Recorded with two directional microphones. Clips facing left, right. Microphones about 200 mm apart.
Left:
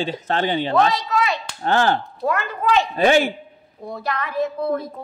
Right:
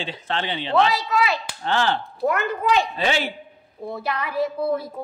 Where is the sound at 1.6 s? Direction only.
45° left (ahead or behind).